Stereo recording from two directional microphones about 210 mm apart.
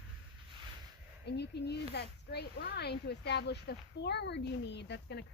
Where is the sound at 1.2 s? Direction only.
50° left (ahead or behind).